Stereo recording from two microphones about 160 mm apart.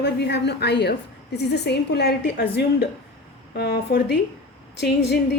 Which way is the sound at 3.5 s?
75° left (ahead or behind).